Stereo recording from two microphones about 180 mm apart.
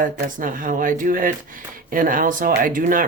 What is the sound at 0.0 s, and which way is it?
Speech, 50° right (ahead or behind).